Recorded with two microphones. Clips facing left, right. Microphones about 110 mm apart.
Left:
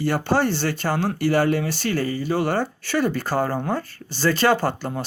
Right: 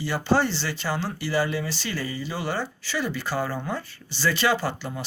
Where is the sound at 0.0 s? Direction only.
55° left (ahead or behind).